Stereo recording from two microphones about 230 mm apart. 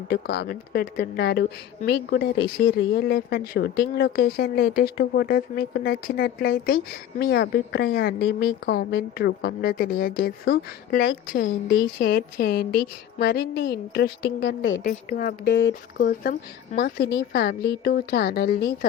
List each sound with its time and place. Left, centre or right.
0.1 s a woman's voice: left
15.5 s a woman's voice: left
16.3 s a woman's voice: left